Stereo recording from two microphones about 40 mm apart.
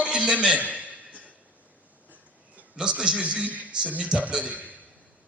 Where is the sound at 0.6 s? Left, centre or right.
Right.